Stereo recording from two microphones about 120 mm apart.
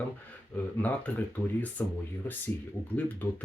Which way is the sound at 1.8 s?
15° left (ahead or behind).